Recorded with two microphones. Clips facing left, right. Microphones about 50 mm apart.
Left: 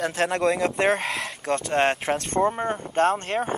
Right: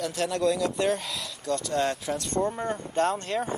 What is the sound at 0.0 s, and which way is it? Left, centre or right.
Speech, left.